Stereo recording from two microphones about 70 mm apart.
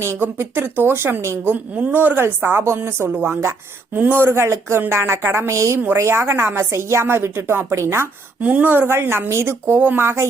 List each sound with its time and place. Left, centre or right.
0.2 s a woman's voice: right
1.7 s speech: right
2.2 s a woman's voice: right
8.4 s a woman's voice: right